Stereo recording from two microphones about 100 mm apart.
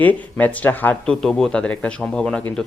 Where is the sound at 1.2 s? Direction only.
5° left (ahead or behind).